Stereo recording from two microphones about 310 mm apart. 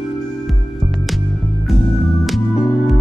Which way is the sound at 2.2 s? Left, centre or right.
Centre.